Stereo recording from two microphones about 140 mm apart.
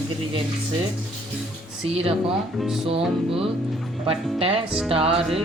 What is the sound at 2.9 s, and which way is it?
Music, 40° right (ahead or behind).